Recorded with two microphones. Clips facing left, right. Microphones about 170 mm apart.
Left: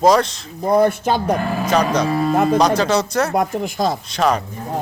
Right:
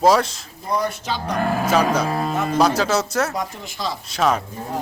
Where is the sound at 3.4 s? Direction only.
50° left (ahead or behind).